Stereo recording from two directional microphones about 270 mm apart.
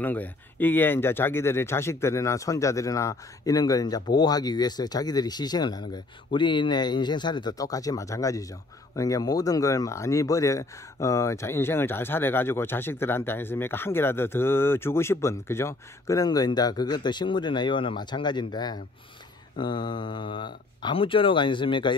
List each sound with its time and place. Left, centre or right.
0.0 s speech: centre